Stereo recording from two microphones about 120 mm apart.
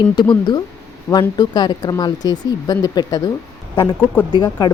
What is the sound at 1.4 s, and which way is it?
Speech, 35° left (ahead or behind).